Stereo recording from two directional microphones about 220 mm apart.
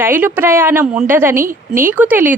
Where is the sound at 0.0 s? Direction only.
10° right (ahead or behind).